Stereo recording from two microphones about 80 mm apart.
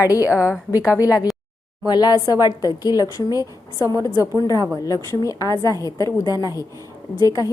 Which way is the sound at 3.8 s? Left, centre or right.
Left.